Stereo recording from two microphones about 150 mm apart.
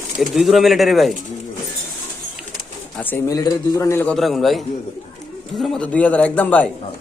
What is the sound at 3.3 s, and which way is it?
Speech, 25° left (ahead or behind).